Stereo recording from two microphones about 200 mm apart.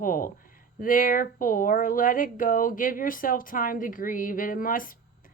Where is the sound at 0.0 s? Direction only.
45° left (ahead or behind).